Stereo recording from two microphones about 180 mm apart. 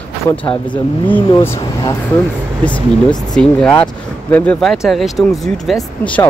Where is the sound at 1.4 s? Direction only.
15° left (ahead or behind).